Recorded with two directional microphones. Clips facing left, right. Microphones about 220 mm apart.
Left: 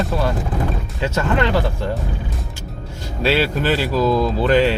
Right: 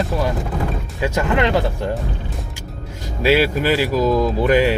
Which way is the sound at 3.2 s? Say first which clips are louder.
Right 2 dB; 10° right (ahead or behind).